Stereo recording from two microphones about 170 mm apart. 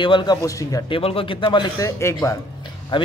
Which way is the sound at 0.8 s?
30° left (ahead or behind).